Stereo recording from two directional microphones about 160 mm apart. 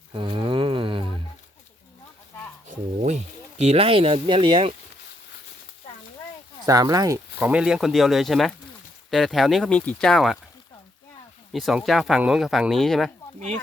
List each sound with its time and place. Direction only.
0.1 s cattle: 30° right (ahead or behind)
2.6 s speech: 50° right (ahead or behind); by 4.7 s 30° right (ahead or behind)
6.7 s speech: 20° right (ahead or behind)
7.3 s speech: 10° right (ahead or behind)
11.5 s speech: centre (ahead or behind)